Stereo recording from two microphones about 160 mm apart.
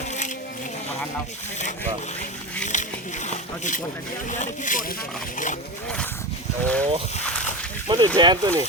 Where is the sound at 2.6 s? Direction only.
50° left (ahead or behind).